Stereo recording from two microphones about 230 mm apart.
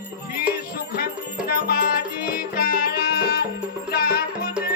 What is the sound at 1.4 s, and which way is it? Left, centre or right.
Music, left.